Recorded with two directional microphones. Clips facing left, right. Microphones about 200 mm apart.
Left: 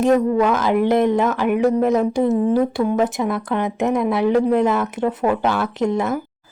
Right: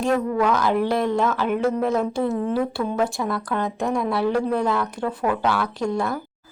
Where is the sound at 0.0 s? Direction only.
20° left (ahead or behind).